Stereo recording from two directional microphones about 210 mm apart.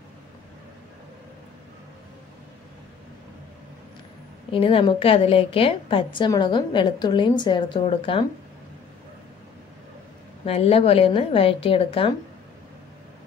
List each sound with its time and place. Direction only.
4.5 s a woman's voice: 25° left (ahead or behind)
10.4 s a woman's voice: 30° left (ahead or behind)